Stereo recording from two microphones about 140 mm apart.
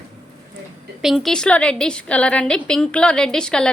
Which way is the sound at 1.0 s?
Centre (ahead or behind).